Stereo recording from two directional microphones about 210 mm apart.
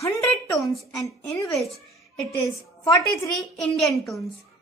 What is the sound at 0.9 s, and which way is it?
Speech, 15° left (ahead or behind).